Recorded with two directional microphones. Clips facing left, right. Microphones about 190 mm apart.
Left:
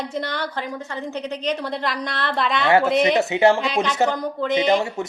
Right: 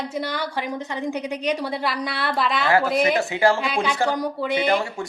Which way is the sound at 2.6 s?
25° left (ahead or behind).